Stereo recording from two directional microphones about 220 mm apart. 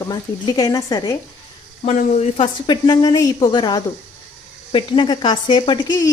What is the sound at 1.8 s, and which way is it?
A woman's voice, 30° left (ahead or behind).